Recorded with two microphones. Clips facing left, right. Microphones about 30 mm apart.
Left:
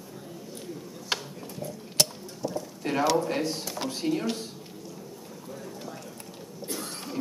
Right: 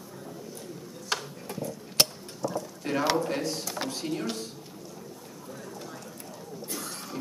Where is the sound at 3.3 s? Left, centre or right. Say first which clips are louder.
Left 1 dB; centre.